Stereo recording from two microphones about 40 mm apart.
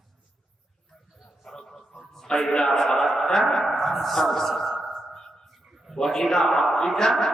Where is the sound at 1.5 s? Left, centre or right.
Centre.